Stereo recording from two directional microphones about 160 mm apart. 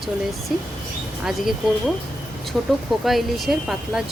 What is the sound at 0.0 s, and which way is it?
A woman's voice, centre (ahead or behind).